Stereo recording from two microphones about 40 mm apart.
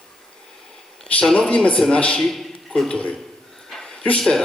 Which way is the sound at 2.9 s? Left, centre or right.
Left.